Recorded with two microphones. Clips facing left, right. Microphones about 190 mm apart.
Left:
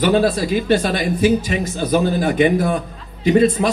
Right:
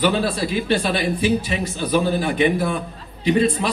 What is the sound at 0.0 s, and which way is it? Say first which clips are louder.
Speech: left 4 dB; 45° left (ahead or behind).